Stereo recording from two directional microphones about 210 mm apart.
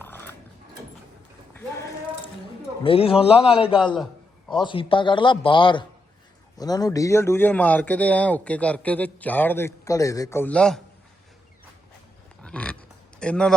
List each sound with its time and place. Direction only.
0.0 s dog: 10° left (ahead or behind)
2.8 s speech: 25° left (ahead or behind)
3.9 s a sound: centre (ahead or behind)
4.6 s speech: 25° left (ahead or behind); by 10.8 s 5° left (ahead or behind)
12.4 s a sound: 5° left (ahead or behind)
13.1 s a man's voice: 5° left (ahead or behind)